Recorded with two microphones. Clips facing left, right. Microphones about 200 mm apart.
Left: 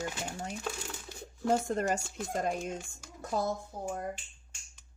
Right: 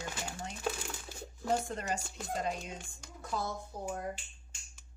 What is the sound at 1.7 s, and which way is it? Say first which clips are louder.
Speech: left 6 dB; 45° left (ahead or behind).